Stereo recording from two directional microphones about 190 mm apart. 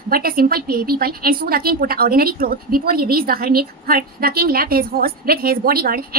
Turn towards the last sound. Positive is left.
turn(degrees=-50)  # may be behind; listen again after turning